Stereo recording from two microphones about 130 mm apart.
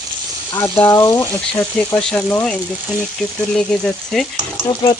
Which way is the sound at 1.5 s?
15° left (ahead or behind).